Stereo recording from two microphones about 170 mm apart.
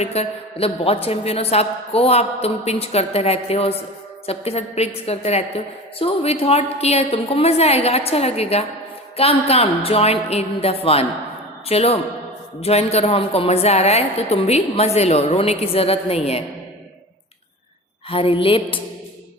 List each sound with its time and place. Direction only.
0.0 s a woman's voice: 40° left (ahead or behind)
18.1 s a woman's voice: 35° left (ahead or behind)